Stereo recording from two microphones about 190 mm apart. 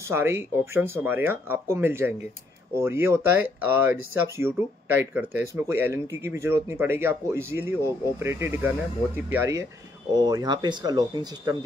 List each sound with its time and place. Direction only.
0.1 s speech: 10° right (ahead or behind)